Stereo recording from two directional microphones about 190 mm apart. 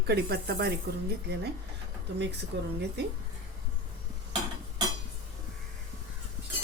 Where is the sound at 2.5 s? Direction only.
65° right (ahead or behind).